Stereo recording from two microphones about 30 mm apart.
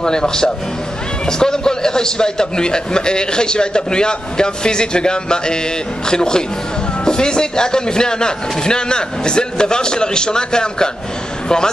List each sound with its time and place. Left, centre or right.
0.0 s a man's voice: left